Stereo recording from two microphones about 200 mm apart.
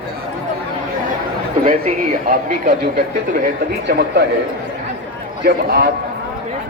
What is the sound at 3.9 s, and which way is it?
Speech, 55° right (ahead or behind).